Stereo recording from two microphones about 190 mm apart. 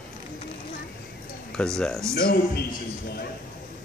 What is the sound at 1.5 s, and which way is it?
Speech, 5° left (ahead or behind).